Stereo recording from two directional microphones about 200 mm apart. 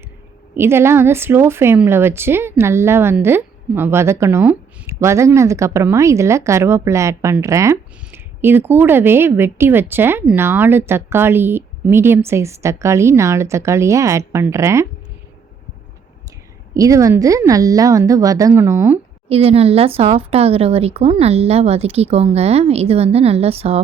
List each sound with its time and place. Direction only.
0.5 s speech: 10° right (ahead or behind)
16.7 s speech: 15° right (ahead or behind)
19.3 s speech: 30° right (ahead or behind)